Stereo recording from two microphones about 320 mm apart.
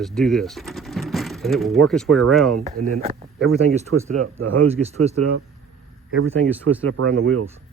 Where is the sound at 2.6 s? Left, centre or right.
Right.